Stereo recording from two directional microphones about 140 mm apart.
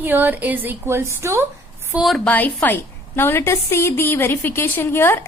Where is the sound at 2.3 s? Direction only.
10° left (ahead or behind).